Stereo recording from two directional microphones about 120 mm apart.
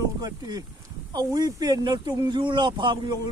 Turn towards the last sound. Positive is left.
turn(degrees=-40)  # may be behind; listen again after turning